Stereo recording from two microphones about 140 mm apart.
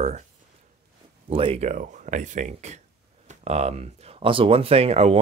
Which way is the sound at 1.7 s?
60° right (ahead or behind).